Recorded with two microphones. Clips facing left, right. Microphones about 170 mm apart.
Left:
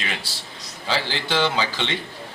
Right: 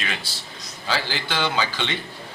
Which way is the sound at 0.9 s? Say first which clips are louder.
Left 2 dB; 25° left (ahead or behind).